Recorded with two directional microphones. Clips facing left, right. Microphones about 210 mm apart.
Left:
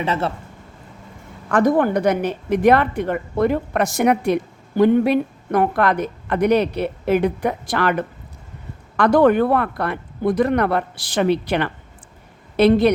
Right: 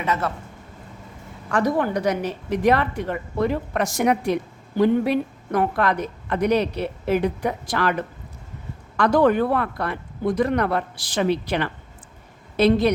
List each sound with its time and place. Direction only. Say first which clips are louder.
0.0 s a man's voice: left 3 dB; 30° left (ahead or behind)
1.5 s a woman's voice: left 5 dB; 55° left (ahead or behind)
9.0 s a woman's voice: left 3 dB; 60° left (ahead or behind)